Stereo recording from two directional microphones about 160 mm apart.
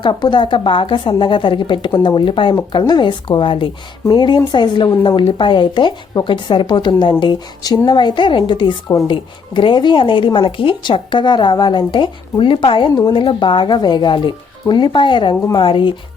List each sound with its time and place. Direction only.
0.0 s a woman's voice: 30° left (ahead or behind)
15.4 s speech: 20° left (ahead or behind)
15.6 s a woman's voice: 30° left (ahead or behind)